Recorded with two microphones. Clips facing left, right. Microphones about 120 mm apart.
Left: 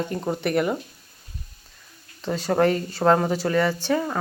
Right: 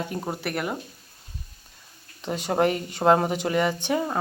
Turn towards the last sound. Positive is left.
turn(degrees=-20)  # may be behind; listen again after turning